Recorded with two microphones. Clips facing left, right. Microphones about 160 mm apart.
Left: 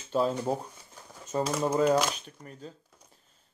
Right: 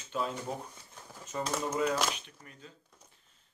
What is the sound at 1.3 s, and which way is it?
Speech, 30° left (ahead or behind).